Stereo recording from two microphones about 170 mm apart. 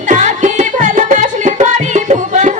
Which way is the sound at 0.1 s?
45° right (ahead or behind).